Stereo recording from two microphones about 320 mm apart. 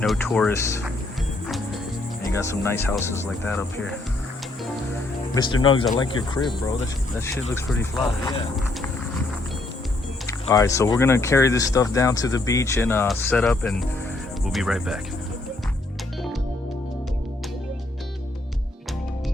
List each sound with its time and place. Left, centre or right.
0.0 s speech: centre
2.2 s speech: centre
5.3 s speech: centre
7.5 s speech: centre
10.2 s speech: centre